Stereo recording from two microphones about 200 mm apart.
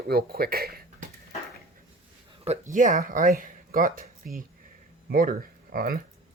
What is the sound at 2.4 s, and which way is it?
Speech, 35° right (ahead or behind).